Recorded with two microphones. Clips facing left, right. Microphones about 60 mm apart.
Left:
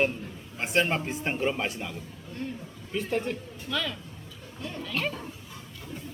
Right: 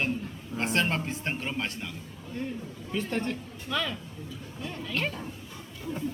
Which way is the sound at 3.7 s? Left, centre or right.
Centre.